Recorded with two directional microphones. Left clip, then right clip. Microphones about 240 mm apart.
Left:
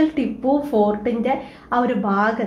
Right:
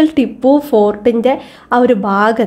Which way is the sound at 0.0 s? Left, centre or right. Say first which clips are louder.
Right 8 dB; right.